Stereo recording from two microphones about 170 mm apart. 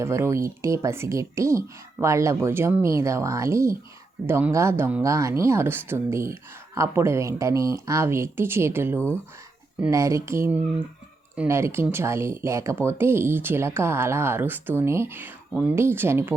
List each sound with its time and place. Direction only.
0.0 s speech: 15° right (ahead or behind)